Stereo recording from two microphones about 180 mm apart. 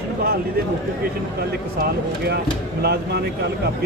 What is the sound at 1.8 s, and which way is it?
Speech, 60° right (ahead or behind).